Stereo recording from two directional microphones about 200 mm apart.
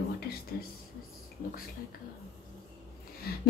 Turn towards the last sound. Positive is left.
turn(degrees=50)  # may be behind; listen again after turning